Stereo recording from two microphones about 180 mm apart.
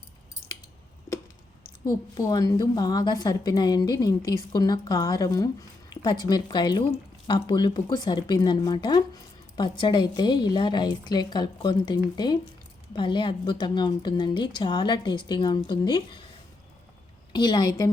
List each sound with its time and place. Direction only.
1.8 s a woman's voice: 20° left (ahead or behind)
17.3 s a woman's voice: 25° left (ahead or behind)